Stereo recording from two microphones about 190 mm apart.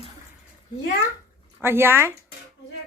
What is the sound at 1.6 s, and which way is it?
Speech, 10° right (ahead or behind).